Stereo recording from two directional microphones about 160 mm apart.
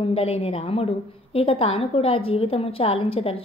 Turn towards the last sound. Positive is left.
turn(degrees=35)  # may be behind; listen again after turning